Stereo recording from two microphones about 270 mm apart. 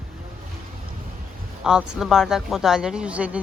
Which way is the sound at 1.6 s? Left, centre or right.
Centre.